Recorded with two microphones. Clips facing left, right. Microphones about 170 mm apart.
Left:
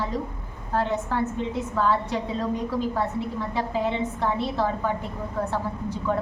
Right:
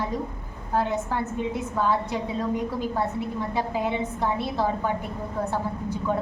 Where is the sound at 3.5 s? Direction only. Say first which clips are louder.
Left 1 dB; 15° right (ahead or behind).